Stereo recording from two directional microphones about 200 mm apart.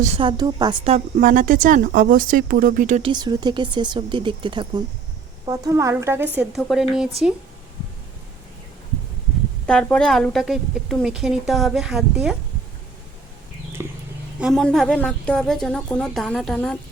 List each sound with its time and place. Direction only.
0.2 s speech: 20° right (ahead or behind)
0.9 s speech: 40° right (ahead or behind)
3.1 s a woman's voice: 20° right (ahead or behind); by 6.8 s centre (ahead or behind)
9.6 s a woman's voice: 5° left (ahead or behind)
13.8 s a sound: 10° right (ahead or behind)
14.3 s a woman's voice: centre (ahead or behind)